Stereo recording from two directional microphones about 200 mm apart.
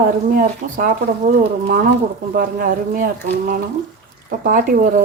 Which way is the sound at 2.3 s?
45° right (ahead or behind).